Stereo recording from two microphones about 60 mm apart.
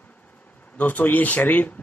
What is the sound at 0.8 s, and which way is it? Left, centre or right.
Speech, left.